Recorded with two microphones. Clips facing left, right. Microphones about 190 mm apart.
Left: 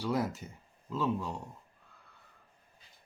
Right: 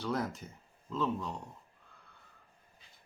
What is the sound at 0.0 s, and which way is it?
Speech, 10° left (ahead or behind).